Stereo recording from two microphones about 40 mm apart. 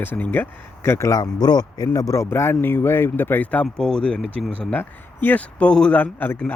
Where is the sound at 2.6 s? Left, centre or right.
Left.